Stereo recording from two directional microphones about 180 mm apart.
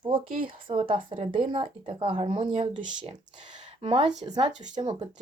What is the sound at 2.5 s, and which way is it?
Speech, 40° right (ahead or behind).